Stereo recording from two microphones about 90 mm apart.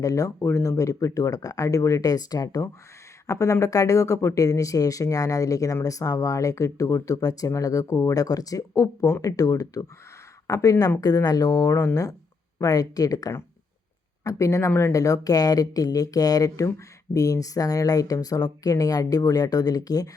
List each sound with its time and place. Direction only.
0.0 s speech: 35° left (ahead or behind)